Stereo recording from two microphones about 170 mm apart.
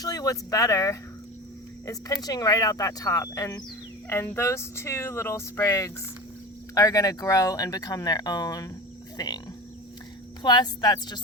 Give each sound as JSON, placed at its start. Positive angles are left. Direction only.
{"t": 0.0, "sound": "speech", "side_deg": 20}
{"t": 2.2, "sound": "speech", "side_deg": 20}
{"t": 9.1, "sound": "cricket", "side_deg": 25}
{"t": 10.4, "sound": "speech", "side_deg": 25}